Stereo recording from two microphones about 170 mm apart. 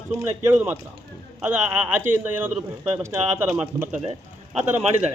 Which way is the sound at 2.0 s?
15° right (ahead or behind).